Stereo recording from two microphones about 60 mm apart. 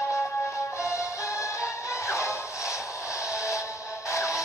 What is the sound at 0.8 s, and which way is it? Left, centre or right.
Music, left.